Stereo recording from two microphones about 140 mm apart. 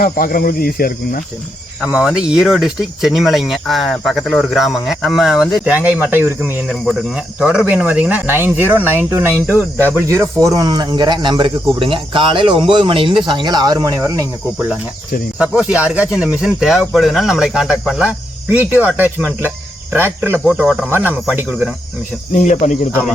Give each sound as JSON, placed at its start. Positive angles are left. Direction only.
{"t": 0.0, "sound": "speech", "side_deg": 90}
{"t": 1.8, "sound": "speech", "side_deg": -5}
{"t": 5.7, "sound": "speech", "side_deg": -10}
{"t": 15.4, "sound": "speech", "side_deg": -10}
{"t": 20.4, "sound": "speech", "side_deg": 0}
{"t": 20.9, "sound": "speech", "side_deg": -15}
{"t": 22.4, "sound": "speech", "side_deg": 60}